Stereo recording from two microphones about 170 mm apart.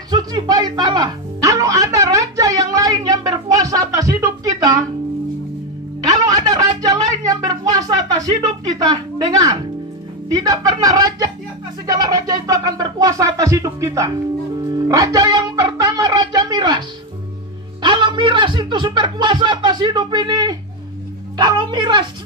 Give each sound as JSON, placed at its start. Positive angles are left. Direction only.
{"t": 0.1, "sound": "music", "side_deg": -25}
{"t": 6.0, "sound": "a sound", "side_deg": -20}
{"t": 10.3, "sound": "speech", "side_deg": -20}
{"t": 14.7, "sound": "music", "side_deg": -20}
{"t": 17.8, "sound": "speech", "side_deg": -25}